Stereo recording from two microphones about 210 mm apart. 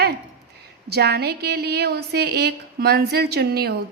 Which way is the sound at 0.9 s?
50° right (ahead or behind).